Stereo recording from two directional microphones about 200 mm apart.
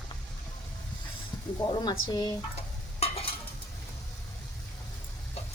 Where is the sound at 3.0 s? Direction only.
30° left (ahead or behind).